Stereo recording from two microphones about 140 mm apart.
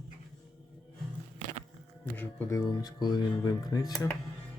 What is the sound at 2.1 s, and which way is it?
Speech, 15° left (ahead or behind).